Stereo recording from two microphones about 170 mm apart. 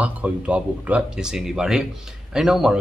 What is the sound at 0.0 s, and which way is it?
Speech, 5° right (ahead or behind).